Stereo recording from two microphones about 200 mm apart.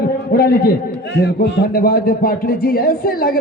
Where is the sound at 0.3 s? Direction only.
50° left (ahead or behind).